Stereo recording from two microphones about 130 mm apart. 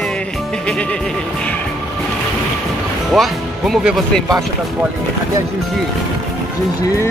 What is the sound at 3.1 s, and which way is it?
Speech, centre (ahead or behind).